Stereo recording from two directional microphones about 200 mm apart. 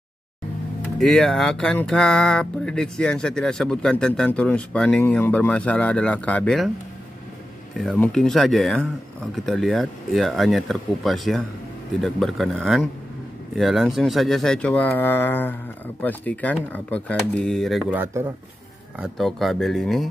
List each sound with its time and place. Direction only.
0.9 s speech: centre (ahead or behind)
7.7 s speech: centre (ahead or behind)